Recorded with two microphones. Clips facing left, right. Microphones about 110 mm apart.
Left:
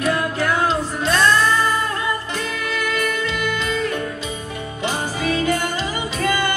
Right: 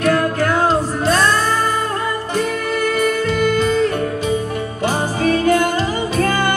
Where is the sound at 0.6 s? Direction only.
40° right (ahead or behind).